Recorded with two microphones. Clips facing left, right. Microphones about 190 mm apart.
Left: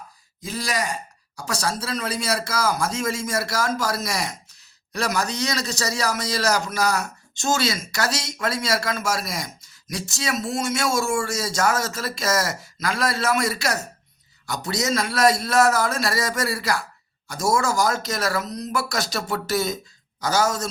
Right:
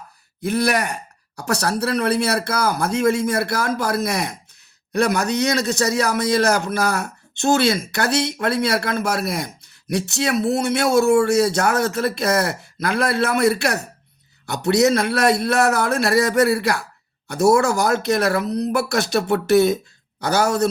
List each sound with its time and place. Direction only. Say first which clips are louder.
0.4 s a man's voice: right 7 dB; 65° right (ahead or behind)